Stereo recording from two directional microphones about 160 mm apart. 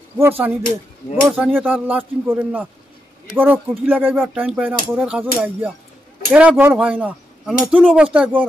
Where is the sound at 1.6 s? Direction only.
10° right (ahead or behind).